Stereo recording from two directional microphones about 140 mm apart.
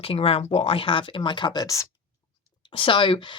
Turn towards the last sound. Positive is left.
turn(degrees=35)  # may be behind; listen again after turning